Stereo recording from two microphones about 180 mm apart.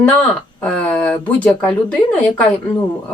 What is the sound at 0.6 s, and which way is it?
Speech, 5° left (ahead or behind).